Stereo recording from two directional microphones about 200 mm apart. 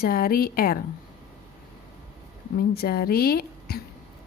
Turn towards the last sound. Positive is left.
turn(degrees=50)  # may be behind; listen again after turning